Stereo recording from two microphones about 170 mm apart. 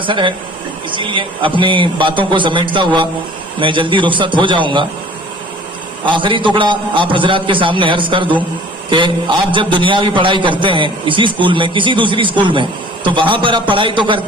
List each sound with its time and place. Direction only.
0.0 s a man's voice: 30° right (ahead or behind)
6.1 s a man's voice: 30° right (ahead or behind)